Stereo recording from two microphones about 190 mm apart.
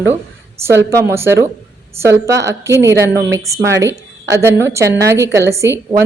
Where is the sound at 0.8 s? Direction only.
15° right (ahead or behind).